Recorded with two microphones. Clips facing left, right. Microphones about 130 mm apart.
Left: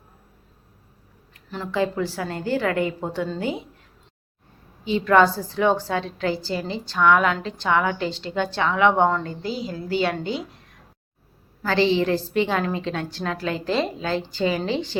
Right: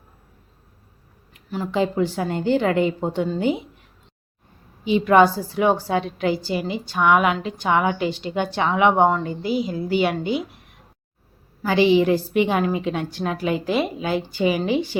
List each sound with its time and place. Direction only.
1.3 s a woman's voice: 10° right (ahead or behind)
4.9 s a woman's voice: 15° right (ahead or behind)